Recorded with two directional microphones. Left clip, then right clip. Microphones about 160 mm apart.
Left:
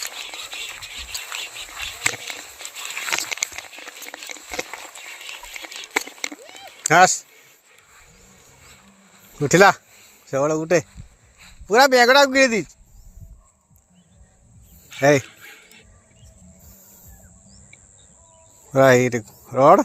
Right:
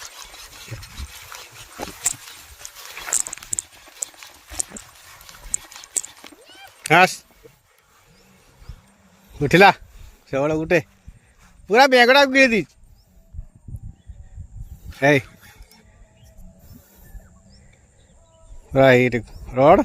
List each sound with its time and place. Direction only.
3.0 s crumpling: 65° left (ahead or behind)
6.8 s speech: 40° right (ahead or behind)
9.4 s a man's voice: 30° right (ahead or behind)
14.9 s speech: 30° right (ahead or behind)
18.7 s speech: 30° right (ahead or behind)